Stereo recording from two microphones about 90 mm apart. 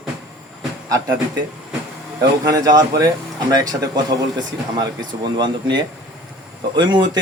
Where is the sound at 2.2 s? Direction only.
45° right (ahead or behind).